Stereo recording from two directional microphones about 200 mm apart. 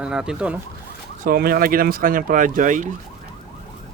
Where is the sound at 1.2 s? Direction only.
45° right (ahead or behind).